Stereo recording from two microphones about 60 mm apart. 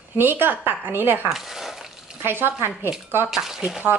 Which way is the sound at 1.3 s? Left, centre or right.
Centre.